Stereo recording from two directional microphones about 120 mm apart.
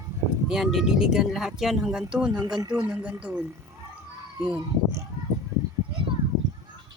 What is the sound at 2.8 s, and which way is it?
Speech, 15° right (ahead or behind).